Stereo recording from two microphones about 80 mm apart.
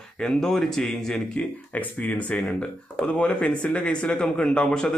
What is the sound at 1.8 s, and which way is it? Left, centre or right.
A man's voice, centre.